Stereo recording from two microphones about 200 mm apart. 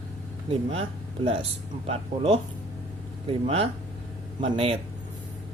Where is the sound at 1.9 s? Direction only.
30° right (ahead or behind).